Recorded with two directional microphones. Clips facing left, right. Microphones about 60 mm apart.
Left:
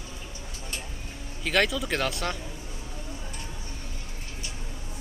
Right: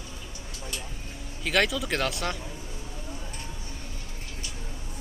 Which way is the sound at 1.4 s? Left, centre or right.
Centre.